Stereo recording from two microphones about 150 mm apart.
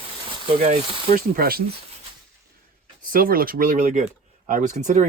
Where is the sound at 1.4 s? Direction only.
85° right.